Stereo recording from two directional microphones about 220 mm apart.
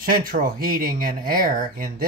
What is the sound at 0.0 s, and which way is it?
Speech, 40° right (ahead or behind).